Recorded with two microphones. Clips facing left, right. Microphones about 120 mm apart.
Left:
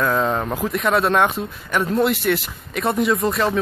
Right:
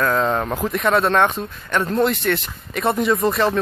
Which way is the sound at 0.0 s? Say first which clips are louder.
Right 1 dB; 5° left (ahead or behind).